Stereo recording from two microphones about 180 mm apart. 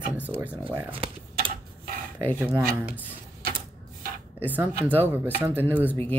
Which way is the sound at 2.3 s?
10° right (ahead or behind).